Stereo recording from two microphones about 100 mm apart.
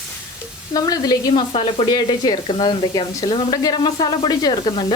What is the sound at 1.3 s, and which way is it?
Speech, 60° left (ahead or behind).